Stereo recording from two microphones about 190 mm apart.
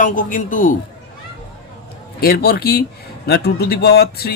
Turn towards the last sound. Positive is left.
turn(degrees=55)  # may be behind; listen again after turning